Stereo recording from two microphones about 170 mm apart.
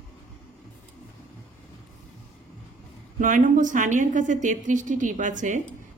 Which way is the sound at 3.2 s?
50° right (ahead or behind).